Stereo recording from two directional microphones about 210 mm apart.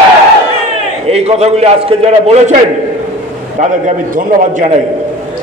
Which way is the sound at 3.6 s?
35° right (ahead or behind).